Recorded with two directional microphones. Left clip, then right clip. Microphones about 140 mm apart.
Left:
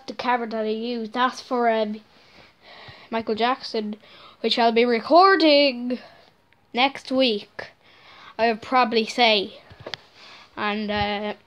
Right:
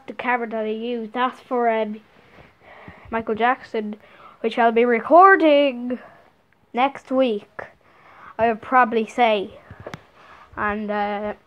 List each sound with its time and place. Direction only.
0.0 s a woman's voice: 15° left (ahead or behind)